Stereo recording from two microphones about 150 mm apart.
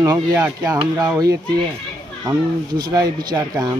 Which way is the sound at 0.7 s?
30° right (ahead or behind).